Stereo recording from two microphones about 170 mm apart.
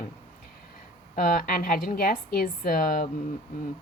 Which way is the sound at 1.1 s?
55° left (ahead or behind).